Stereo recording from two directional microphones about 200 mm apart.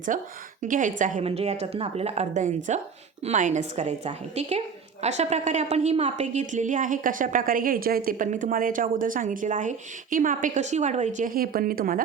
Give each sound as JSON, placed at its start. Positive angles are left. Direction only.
{"t": 0.1, "sound": "a woman's voice", "side_deg": -40}